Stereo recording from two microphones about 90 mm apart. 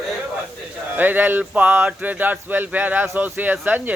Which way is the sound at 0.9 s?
20° right (ahead or behind).